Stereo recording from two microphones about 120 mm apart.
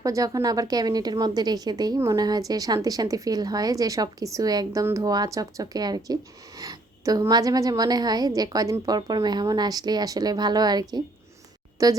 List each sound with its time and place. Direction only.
0.0 s a woman's voice: 30° right (ahead or behind)